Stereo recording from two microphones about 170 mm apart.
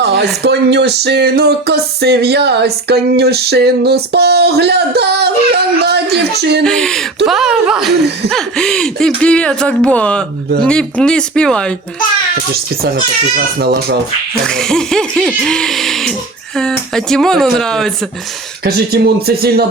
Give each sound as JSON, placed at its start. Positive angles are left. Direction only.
{"t": 0.0, "sound": "a sound", "side_deg": -75}
{"t": 0.4, "sound": "music", "side_deg": -80}
{"t": 6.7, "sound": "speech", "side_deg": 5}
{"t": 13.3, "sound": "music", "side_deg": -65}
{"t": 14.4, "sound": "speech", "side_deg": 5}
{"t": 18.6, "sound": "music", "side_deg": -65}